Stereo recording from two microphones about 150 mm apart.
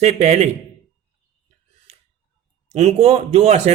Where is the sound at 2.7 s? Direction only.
45° right (ahead or behind).